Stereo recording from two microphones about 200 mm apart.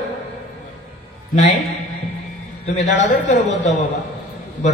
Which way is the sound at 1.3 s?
35° left (ahead or behind).